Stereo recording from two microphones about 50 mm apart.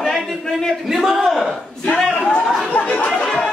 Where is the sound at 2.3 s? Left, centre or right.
Left.